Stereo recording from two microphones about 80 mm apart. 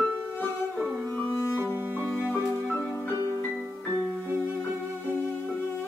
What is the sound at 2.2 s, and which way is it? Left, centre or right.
Music, left.